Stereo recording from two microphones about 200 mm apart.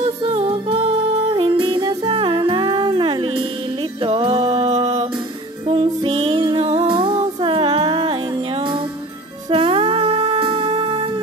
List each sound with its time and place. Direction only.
0.0 s music: 30° right (ahead or behind)